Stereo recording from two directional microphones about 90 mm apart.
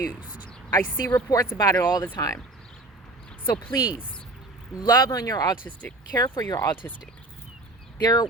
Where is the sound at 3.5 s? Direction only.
65° left (ahead or behind).